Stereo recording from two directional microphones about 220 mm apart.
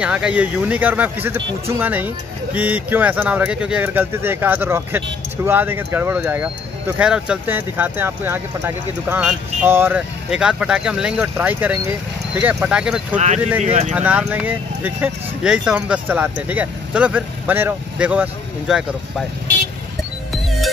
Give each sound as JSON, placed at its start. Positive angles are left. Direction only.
{"t": 0.0, "sound": "speech", "side_deg": -5}
{"t": 13.7, "sound": "speech", "side_deg": -30}
{"t": 13.9, "sound": "speech", "side_deg": -5}